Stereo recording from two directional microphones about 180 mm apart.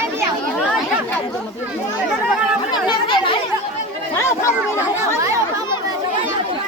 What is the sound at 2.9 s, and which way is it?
Speech, 25° left (ahead or behind).